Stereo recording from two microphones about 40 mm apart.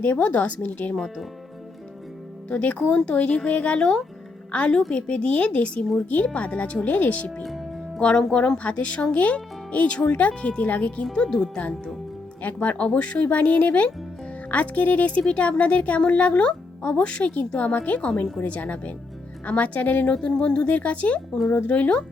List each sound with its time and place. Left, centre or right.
0.0 s speech: left
0.9 s speech: centre
2.5 s speech: left
4.5 s speech: left
7.9 s speech: left
11.0 s speech: centre
12.4 s speech: left
20.1 s speech: left